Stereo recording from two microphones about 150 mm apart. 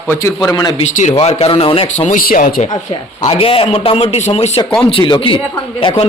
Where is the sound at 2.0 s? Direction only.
70° left (ahead or behind).